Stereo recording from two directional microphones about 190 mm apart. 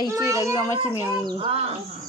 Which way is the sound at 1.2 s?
30° right (ahead or behind).